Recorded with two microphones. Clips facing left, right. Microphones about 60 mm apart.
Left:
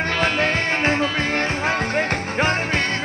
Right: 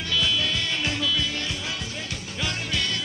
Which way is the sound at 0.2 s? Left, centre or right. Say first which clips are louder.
Left 6 dB; left.